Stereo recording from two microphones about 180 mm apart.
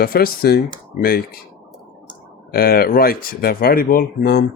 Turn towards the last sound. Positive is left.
turn(degrees=60)  # may be behind; listen again after turning